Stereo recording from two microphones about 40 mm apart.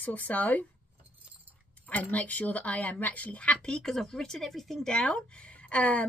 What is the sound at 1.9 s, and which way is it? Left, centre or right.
Speech, left.